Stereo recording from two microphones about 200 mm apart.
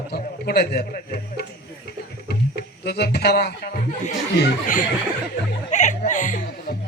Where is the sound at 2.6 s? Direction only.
55° left (ahead or behind).